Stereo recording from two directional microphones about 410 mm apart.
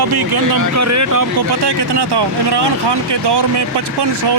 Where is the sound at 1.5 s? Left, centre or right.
Right.